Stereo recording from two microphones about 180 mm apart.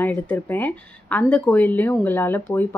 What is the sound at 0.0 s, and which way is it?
Speech, 10° left (ahead or behind).